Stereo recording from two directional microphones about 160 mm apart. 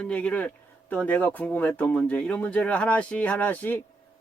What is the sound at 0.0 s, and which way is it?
A man's voice, 5° left (ahead or behind).